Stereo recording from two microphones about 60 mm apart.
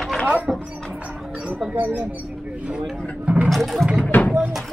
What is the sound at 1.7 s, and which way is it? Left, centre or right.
Speech, right.